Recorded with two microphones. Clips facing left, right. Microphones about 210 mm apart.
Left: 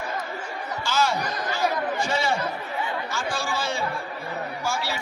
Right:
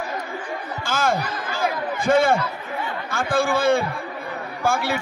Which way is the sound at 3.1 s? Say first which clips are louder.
Right 7 dB; 55° right (ahead or behind).